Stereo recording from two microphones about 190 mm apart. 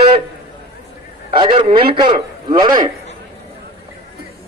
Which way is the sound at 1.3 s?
25° right (ahead or behind).